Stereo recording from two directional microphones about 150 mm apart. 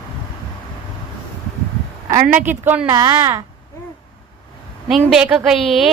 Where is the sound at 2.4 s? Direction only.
15° right (ahead or behind).